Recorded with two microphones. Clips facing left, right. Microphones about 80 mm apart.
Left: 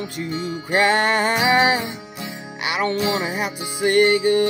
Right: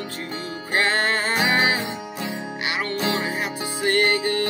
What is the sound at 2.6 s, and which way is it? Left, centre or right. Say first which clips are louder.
Music: left 5 dB; left.